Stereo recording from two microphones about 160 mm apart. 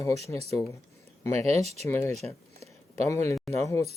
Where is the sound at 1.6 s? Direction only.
40° right (ahead or behind).